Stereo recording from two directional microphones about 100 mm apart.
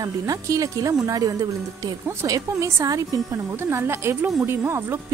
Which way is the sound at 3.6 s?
25° right (ahead or behind).